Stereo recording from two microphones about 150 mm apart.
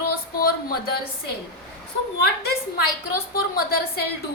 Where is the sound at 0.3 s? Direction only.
90° left.